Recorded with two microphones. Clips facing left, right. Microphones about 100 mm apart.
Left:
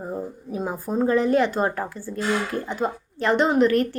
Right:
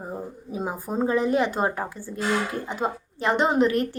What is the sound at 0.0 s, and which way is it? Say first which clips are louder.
A woman's voice: left 3 dB; 10° right (ahead or behind).